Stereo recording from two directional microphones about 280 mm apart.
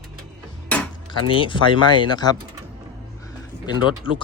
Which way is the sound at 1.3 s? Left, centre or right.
Centre.